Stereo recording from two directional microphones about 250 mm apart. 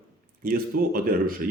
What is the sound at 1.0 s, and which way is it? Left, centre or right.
Speech, right.